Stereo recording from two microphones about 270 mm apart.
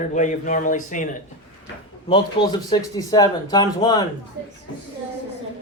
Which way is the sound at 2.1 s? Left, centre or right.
Centre.